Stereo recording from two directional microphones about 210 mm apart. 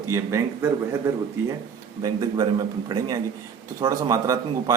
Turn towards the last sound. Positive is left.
turn(degrees=-15)  # may be behind; listen again after turning